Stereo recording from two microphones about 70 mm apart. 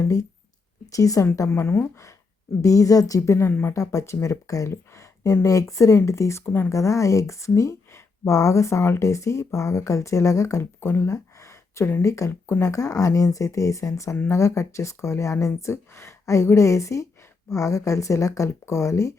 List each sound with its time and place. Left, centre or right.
0.0 s speech: left
3.2 s speech: left
3.8 s speech: left
6.4 s speech: left
6.7 s speech: left
10.6 s speech: left
12.3 s speech: left
12.6 s speech: left